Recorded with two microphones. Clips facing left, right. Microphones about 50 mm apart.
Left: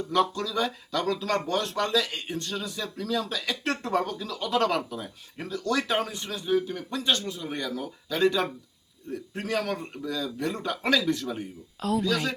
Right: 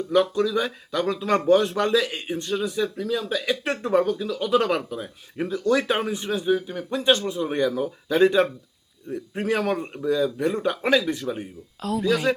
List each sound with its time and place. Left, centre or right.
0.1 s a man's voice: centre
11.8 s speech: centre
12.0 s a man's voice: centre